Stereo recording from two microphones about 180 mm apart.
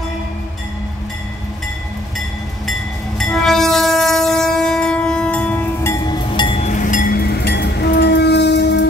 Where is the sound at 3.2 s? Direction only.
Centre (ahead or behind); by 6.6 s 25° left (ahead or behind).